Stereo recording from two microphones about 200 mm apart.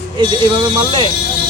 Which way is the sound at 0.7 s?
25° right (ahead or behind).